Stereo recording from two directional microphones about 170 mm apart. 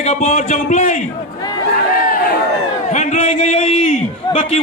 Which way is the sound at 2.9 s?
45° left (ahead or behind).